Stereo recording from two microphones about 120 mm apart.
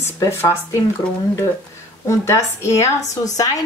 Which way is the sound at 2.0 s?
25° left (ahead or behind).